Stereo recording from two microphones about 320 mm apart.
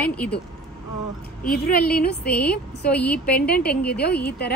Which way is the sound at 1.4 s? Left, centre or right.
Left.